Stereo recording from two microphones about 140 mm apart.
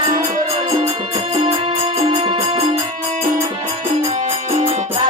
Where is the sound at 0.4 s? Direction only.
45° right (ahead or behind).